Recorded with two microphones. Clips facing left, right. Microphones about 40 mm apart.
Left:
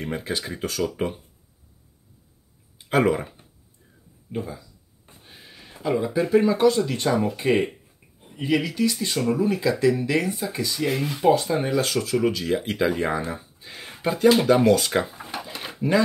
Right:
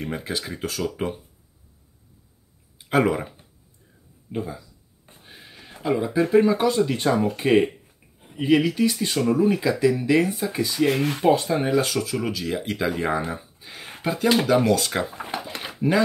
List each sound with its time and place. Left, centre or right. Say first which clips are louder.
0.0 s speech: left 1 dB; centre
2.8 s speech: even; centre
4.3 s a sound: right 1 dB; centre
6.3 s speech: left 1 dB; centre
7.4 s speech: right 5 dB; right
10.9 s speech: right 3 dB; right
11.3 s speech: right 1 dB; centre
13.2 s a sound: right 1 dB; centre
14.0 s speech: left 3 dB; centre
15.1 s drawer open or close: right 3 dB; right
15.6 s dog: even; centre